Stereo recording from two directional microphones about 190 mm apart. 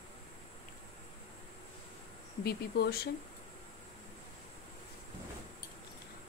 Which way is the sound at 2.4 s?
55° left (ahead or behind).